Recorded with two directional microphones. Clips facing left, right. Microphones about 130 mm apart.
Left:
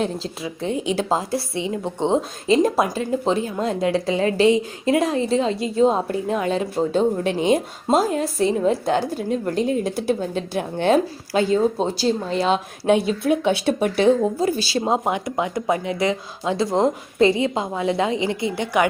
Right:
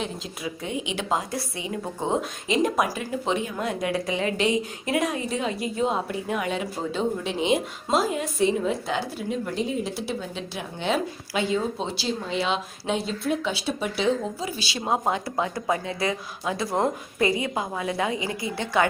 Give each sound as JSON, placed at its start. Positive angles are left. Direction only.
{"t": 0.7, "sound": "a woman's voice", "side_deg": 40}
{"t": 7.3, "sound": "a woman's voice", "side_deg": 45}
{"t": 14.8, "sound": "a woman's voice", "side_deg": 20}